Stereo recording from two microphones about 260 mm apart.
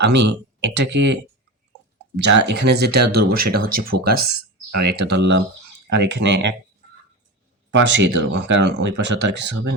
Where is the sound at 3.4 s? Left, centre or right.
Right.